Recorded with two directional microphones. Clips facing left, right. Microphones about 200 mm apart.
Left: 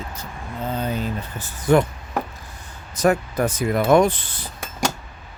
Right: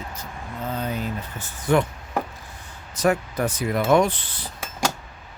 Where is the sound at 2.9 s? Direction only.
45° left (ahead or behind).